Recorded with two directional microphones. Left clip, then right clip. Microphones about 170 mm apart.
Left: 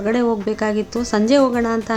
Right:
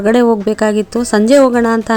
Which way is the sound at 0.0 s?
55° right (ahead or behind).